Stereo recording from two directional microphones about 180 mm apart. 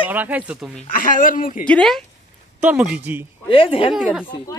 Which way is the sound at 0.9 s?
50° left (ahead or behind).